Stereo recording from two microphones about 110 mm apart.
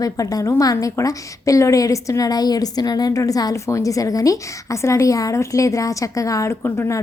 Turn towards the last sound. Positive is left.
turn(degrees=25)  # may be behind; listen again after turning